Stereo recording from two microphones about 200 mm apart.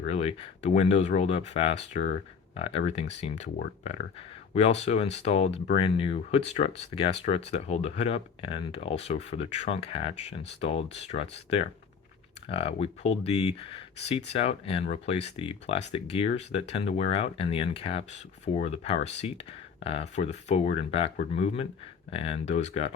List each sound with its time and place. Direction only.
0.0 s speech: 30° left (ahead or behind)
2.0 s speech: 55° left (ahead or behind)
2.6 s speech: 30° left (ahead or behind)
4.5 s speech: 35° left (ahead or behind)